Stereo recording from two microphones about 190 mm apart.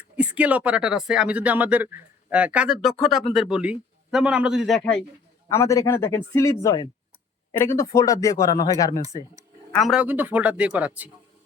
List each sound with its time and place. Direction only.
0.2 s a man's voice: 5° right (ahead or behind)
5.5 s speech: 15° left (ahead or behind)
9.0 s speech: 15° right (ahead or behind)
9.7 s speech: centre (ahead or behind)